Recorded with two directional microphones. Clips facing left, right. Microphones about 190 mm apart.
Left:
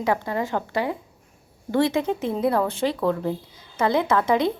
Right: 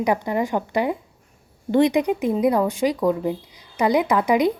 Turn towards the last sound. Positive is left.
turn(degrees=-15)  # may be behind; listen again after turning